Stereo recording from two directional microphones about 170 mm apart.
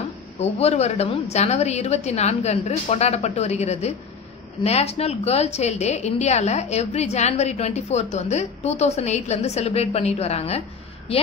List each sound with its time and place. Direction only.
0.4 s a woman's voice: 40° left (ahead or behind)